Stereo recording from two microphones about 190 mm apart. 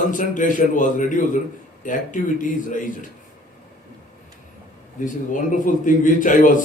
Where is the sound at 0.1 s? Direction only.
45° left (ahead or behind).